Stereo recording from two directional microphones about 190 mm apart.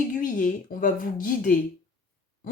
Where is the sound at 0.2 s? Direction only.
45° left (ahead or behind).